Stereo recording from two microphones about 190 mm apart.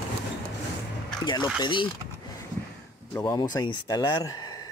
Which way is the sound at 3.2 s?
20° left (ahead or behind).